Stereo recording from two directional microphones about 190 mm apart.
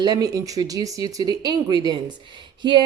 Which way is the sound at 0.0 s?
20° right (ahead or behind).